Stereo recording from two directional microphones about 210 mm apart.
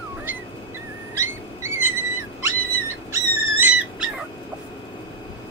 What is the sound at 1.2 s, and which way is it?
Dog, 10° right (ahead or behind).